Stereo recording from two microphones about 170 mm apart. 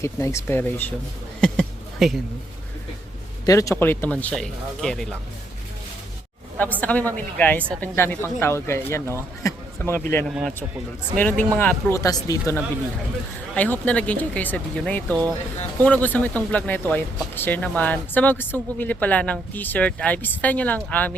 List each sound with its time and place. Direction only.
0.0 s speech: 15° left (ahead or behind)
1.4 s a sound: centre (ahead or behind)
3.4 s speech: 20° left (ahead or behind); by 5.0 s 5° left (ahead or behind)
6.6 s speech: 10° left (ahead or behind)
10.2 s a man's voice: centre (ahead or behind); by 12.6 s 20° left (ahead or behind)
13.5 s speech: 10° left (ahead or behind)